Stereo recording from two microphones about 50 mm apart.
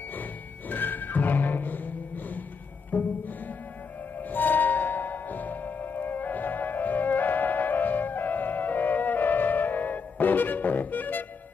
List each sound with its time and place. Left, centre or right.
0.1 s music: left
4.2 s music: left